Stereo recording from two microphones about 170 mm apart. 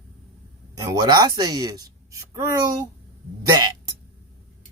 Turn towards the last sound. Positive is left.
turn(degrees=-20)  # may be behind; listen again after turning